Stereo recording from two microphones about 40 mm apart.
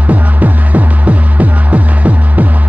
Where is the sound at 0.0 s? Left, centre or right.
Right.